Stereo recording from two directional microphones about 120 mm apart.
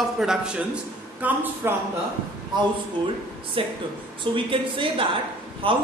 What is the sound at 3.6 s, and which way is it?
A man's voice, 45° right (ahead or behind).